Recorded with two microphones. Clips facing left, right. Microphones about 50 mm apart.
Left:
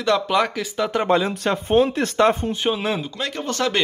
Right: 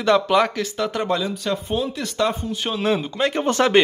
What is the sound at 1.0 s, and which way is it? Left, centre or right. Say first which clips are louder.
Speech: left 6 dB; left.